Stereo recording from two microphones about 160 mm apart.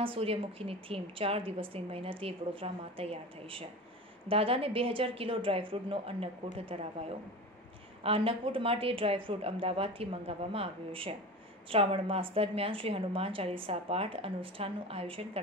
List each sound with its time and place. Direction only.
0.0 s a woman's voice: 35° right (ahead or behind)